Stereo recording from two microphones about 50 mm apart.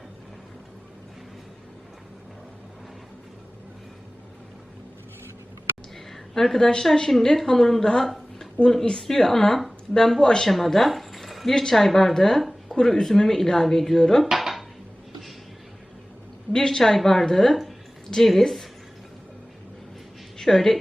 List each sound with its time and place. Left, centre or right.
6.1 s a sound: centre
6.8 s speech: centre
12.6 s a sound: centre
12.9 s speech: centre
14.3 s dishes: centre
16.5 s a woman's voice: centre
20.4 s a woman's voice: centre